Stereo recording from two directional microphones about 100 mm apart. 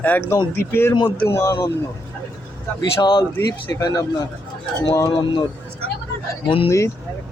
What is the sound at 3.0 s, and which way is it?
Speech, 45° left (ahead or behind).